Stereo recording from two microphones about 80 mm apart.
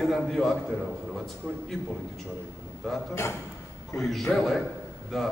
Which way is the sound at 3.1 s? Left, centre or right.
Left.